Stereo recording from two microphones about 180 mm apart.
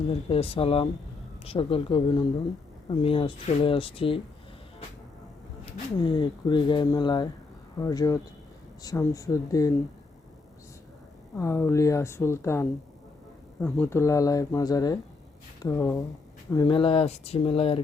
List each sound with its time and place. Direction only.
0.1 s speech: 30° left (ahead or behind)
6.0 s speech: 25° left (ahead or behind)
11.3 s speech: 15° left (ahead or behind); by 17.7 s 30° left (ahead or behind)